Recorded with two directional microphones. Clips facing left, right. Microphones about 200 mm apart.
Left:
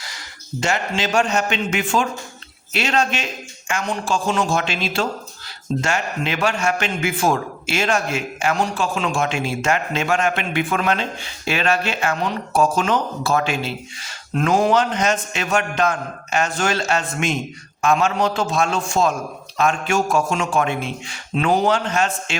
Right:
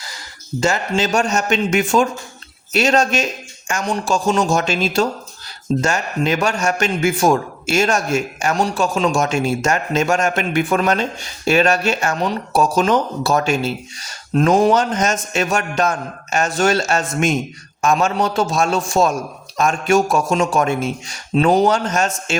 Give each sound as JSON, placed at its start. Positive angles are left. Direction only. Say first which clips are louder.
{"t": 0.6, "sound": "a man's voice", "louder": "right 4 dB", "side_deg": -40}